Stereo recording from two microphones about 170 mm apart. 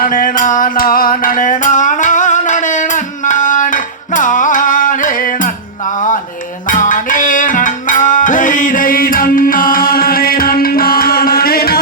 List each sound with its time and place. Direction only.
0.0 s music: 55° left (ahead or behind)
6.7 s music: 50° left (ahead or behind)